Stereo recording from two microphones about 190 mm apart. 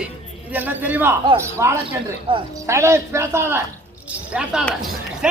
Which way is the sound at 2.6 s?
15° right (ahead or behind).